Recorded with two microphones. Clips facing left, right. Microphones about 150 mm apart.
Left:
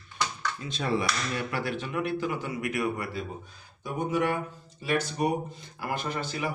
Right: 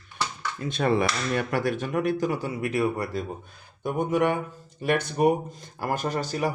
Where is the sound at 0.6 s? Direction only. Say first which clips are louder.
Right 6 dB; 55° right (ahead or behind); by 3.2 s 40° right (ahead or behind).